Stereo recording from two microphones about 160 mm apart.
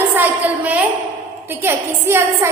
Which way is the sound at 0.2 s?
10° right (ahead or behind).